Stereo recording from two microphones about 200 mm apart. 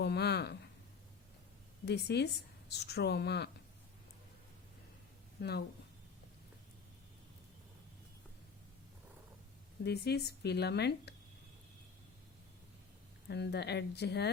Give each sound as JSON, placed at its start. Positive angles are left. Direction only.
{"t": 0.0, "sound": "a woman's voice", "side_deg": 55}
{"t": 1.8, "sound": "a woman's voice", "side_deg": 55}
{"t": 5.4, "sound": "a woman's voice", "side_deg": 55}
{"t": 9.8, "sound": "a woman's voice", "side_deg": 55}
{"t": 13.2, "sound": "a woman's voice", "side_deg": 55}